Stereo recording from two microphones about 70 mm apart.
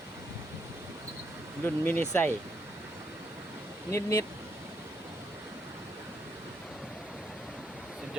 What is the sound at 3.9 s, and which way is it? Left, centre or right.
Speech, left.